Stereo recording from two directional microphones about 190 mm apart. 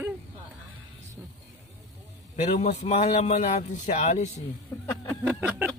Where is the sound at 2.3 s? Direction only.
35° left (ahead or behind).